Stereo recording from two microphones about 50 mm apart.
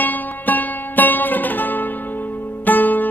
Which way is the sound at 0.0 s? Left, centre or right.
Left.